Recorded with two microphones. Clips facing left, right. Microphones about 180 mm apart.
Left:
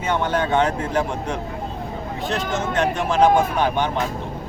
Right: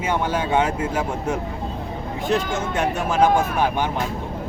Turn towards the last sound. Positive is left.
turn(degrees=-5)  # may be behind; listen again after turning